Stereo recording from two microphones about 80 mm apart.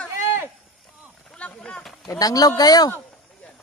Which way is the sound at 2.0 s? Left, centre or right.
Left.